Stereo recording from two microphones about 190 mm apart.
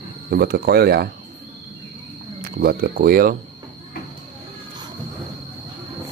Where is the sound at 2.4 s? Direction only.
50° right (ahead or behind).